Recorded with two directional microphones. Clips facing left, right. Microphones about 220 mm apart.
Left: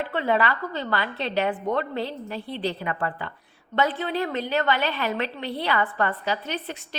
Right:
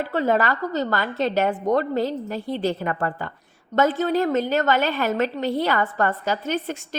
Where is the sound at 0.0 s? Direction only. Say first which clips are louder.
Right 3 dB; 40° right (ahead or behind).